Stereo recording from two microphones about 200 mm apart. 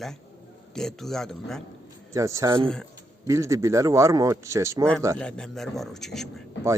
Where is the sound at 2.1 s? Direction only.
15° right (ahead or behind).